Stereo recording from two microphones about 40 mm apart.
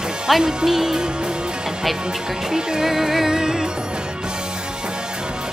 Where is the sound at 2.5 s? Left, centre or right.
Centre.